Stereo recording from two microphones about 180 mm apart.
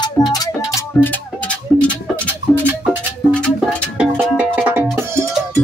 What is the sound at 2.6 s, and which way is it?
Music, 10° right (ahead or behind).